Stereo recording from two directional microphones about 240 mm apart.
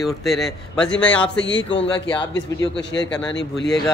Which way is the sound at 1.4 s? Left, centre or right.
Left.